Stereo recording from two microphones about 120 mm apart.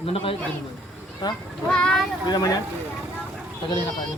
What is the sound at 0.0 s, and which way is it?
Speech, 50° left (ahead or behind).